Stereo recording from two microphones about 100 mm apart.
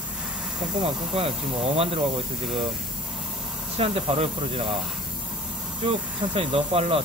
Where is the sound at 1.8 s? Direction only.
75° right (ahead or behind).